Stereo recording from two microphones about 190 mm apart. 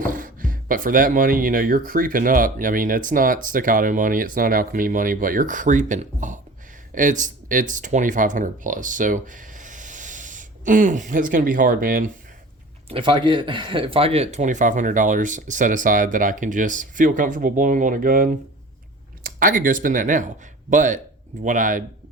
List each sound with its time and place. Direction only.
0.0 s speech: 45° right (ahead or behind)
12.9 s speech: 25° right (ahead or behind); by 21.8 s 40° right (ahead or behind)